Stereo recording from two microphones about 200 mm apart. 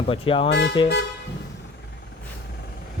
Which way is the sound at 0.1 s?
25° left (ahead or behind).